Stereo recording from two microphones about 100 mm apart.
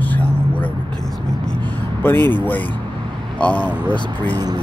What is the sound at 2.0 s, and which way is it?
Speech, 20° left (ahead or behind).